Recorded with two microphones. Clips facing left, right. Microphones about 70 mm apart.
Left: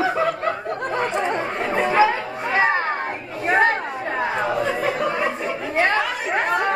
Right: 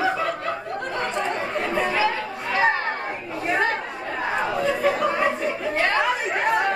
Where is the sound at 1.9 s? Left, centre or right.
Left.